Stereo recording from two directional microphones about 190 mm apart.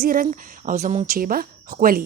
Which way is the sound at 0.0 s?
50° right (ahead or behind).